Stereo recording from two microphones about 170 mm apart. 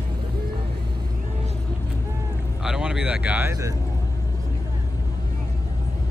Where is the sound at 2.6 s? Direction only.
5° right (ahead or behind).